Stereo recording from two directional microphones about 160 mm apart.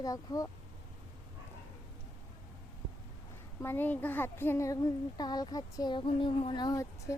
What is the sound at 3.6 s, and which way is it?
Speech, 15° left (ahead or behind).